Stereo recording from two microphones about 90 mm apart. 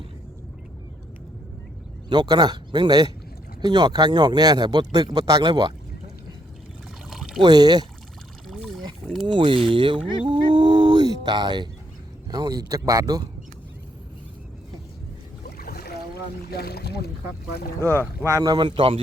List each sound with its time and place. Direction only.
2.0 s speech: 55° right (ahead or behind)
7.1 s pour: 5° right (ahead or behind)
7.4 s speech: 50° right (ahead or behind)
8.4 s pour: centre (ahead or behind)
9.2 s speech: 65° right (ahead or behind)
12.3 s speech: 45° right (ahead or behind)
17.7 s speech: 25° left (ahead or behind)
18.3 s speech: 40° right (ahead or behind)
18.5 s a man's voice: 65° right (ahead or behind)